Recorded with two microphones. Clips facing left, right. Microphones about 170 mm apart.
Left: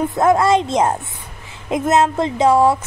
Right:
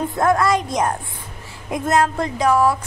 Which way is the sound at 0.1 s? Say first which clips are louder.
Left 3 dB; 20° left (ahead or behind).